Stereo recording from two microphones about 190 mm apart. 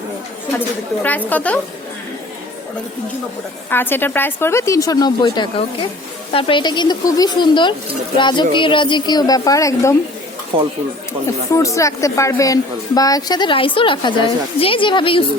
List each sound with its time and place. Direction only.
1.0 s speech: 10° left (ahead or behind)
3.7 s speech: 10° left (ahead or behind)
10.5 s speech: 30° right (ahead or behind)
11.5 s speech: 15° left (ahead or behind)